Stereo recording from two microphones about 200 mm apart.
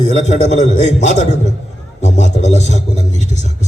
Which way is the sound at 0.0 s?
35° left (ahead or behind).